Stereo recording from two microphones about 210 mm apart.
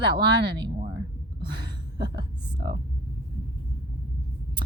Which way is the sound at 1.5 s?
20° right (ahead or behind).